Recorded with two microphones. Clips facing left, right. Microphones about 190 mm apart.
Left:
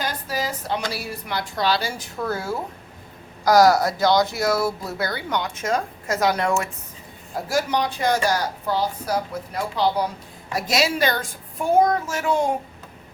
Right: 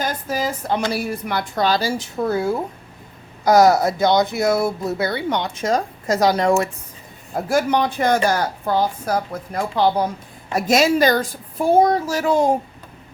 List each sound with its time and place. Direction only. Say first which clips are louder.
0.0 s a woman's voice: right 4 dB; 50° right (ahead or behind)
2.0 s speech: right 6 dB; 20° right (ahead or behind)
7.3 s a woman's voice: right 4 dB; 55° right (ahead or behind); by 12.5 s 40° right (ahead or behind)